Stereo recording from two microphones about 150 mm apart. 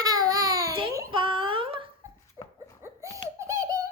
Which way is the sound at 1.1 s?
35° right (ahead or behind).